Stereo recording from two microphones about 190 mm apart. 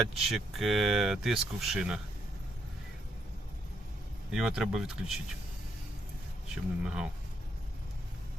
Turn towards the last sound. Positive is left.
turn(degrees=-5)  # may be behind; listen again after turning